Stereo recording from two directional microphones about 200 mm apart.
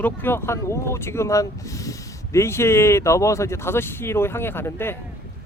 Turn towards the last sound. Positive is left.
turn(degrees=10)  # may be behind; listen again after turning